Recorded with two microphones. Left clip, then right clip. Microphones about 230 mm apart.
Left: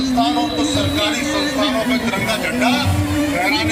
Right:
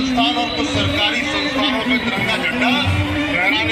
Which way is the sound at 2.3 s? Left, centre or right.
Left.